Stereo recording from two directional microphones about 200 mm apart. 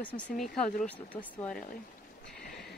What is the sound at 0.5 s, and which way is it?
Speech, 5° left (ahead or behind).